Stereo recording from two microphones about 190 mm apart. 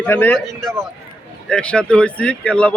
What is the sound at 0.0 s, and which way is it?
Speech, 10° left (ahead or behind).